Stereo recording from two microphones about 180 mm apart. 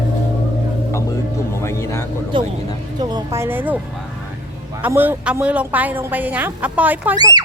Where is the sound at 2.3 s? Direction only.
25° right (ahead or behind).